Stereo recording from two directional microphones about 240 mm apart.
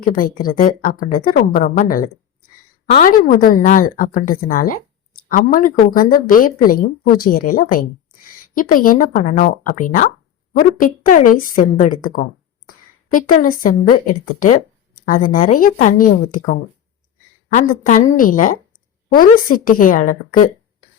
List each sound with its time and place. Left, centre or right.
0.0 s a woman's voice: left